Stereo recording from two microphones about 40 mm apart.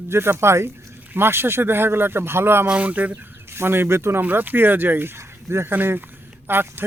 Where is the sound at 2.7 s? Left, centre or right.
Right.